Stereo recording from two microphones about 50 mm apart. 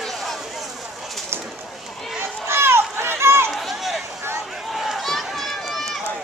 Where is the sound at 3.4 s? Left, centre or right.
Centre.